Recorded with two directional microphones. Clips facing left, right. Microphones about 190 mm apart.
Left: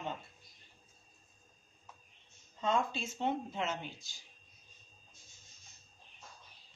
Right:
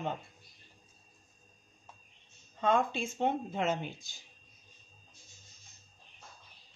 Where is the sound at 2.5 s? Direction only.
55° right (ahead or behind).